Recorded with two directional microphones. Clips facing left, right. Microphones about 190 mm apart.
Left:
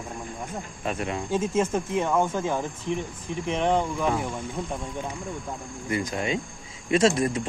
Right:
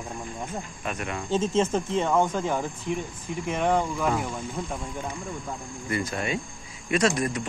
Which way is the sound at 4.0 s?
5° left (ahead or behind).